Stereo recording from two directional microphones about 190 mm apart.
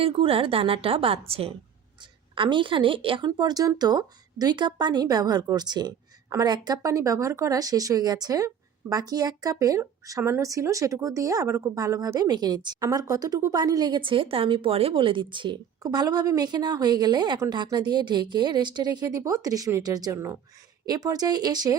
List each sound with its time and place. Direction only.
0.0 s a woman's voice: 30° right (ahead or behind)